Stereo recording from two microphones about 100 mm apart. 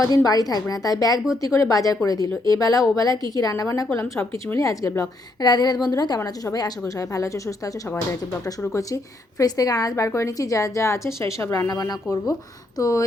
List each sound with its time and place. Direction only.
0.0 s a woman's voice: 35° left (ahead or behind)